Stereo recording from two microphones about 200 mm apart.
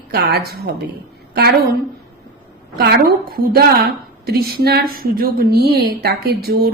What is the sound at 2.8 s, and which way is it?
A woman's voice, 55° right (ahead or behind).